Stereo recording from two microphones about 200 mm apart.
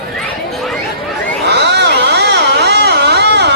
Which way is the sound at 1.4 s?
55° right (ahead or behind).